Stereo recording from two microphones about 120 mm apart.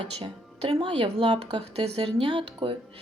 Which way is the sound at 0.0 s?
50° right (ahead or behind).